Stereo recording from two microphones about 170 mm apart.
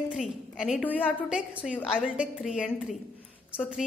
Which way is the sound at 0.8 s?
10° left (ahead or behind).